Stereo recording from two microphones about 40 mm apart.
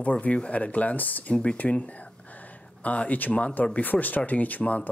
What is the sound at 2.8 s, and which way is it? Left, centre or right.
Speech, left.